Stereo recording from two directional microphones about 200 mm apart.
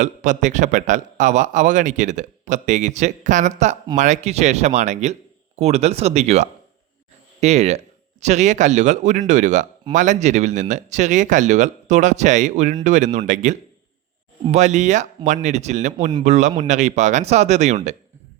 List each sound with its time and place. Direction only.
0.0 s a man's voice: 40° right (ahead or behind)